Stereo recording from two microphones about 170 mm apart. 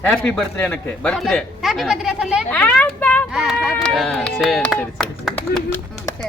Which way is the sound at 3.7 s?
5° left (ahead or behind).